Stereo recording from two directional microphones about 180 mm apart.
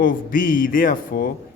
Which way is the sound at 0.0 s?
50° left (ahead or behind).